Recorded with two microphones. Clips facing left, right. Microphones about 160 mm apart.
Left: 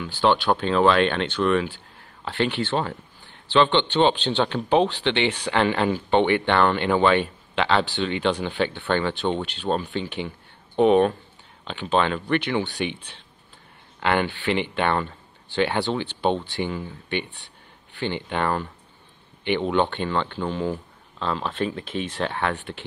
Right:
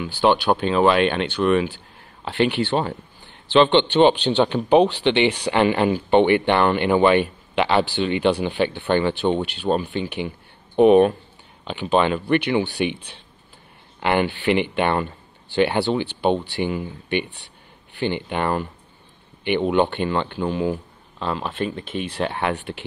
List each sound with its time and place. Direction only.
0.0 s a man's voice: 15° right (ahead or behind)